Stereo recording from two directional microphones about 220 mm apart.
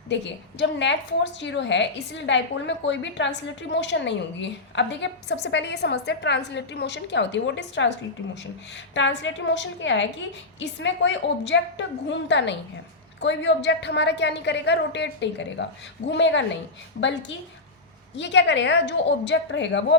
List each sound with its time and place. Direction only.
0.1 s a woman's voice: 55° left (ahead or behind)
9.0 s a woman's voice: 55° left (ahead or behind)